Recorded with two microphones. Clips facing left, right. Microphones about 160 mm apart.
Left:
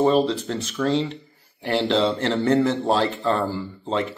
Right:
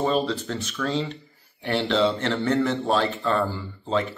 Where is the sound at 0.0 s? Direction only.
25° left (ahead or behind).